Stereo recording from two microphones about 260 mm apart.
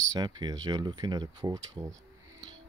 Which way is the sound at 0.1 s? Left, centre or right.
Centre.